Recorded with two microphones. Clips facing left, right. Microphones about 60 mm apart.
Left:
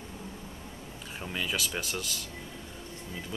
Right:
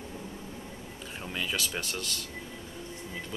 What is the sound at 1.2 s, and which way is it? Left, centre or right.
Speech, centre.